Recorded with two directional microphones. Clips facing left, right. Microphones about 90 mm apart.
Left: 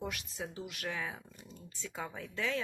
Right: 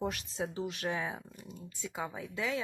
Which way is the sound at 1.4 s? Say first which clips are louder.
Right 3 dB; 15° right (ahead or behind).